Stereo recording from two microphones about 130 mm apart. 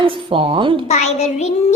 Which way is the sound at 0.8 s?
60° left (ahead or behind).